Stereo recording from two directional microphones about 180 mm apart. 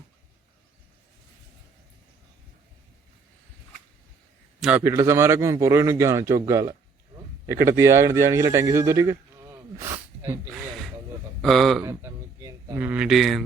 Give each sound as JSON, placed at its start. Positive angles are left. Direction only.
{"t": 4.8, "sound": "a man's voice", "side_deg": -15}
{"t": 11.4, "sound": "speech", "side_deg": 0}
{"t": 11.8, "sound": "speech", "side_deg": -15}